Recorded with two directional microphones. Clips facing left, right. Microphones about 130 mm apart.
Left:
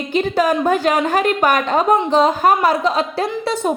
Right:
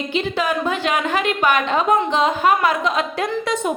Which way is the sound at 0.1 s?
45° left (ahead or behind).